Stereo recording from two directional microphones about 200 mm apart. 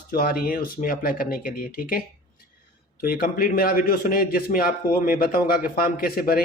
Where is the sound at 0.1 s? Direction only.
50° left (ahead or behind).